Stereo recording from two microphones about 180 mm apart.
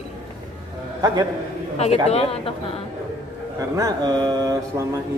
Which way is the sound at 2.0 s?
35° left (ahead or behind).